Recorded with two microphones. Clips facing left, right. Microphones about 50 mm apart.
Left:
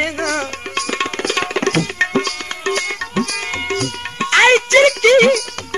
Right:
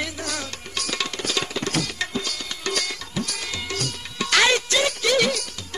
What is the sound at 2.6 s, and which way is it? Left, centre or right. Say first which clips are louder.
Music: left 8 dB; left.